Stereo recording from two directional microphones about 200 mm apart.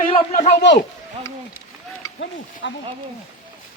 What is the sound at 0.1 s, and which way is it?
Speech, 30° left (ahead or behind).